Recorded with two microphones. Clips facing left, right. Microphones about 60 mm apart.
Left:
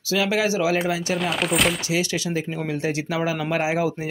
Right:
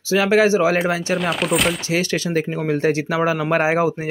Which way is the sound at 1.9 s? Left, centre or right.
Right.